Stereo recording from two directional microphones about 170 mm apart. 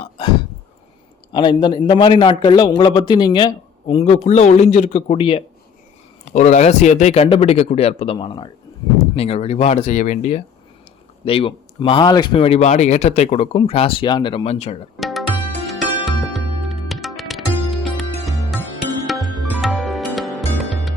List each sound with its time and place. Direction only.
1.3 s a man's voice: 25° left (ahead or behind); by 10.4 s 45° left (ahead or behind)
11.3 s speech: 30° left (ahead or behind)
14.9 s music: centre (ahead or behind)